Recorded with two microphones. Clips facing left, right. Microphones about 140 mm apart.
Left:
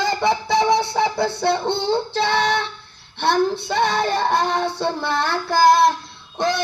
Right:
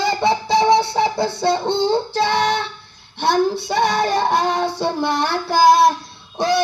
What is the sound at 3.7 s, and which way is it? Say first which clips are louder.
Child singing: right 2 dB; 15° right (ahead or behind).